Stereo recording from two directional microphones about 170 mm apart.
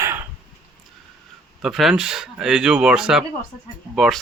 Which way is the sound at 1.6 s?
Centre (ahead or behind).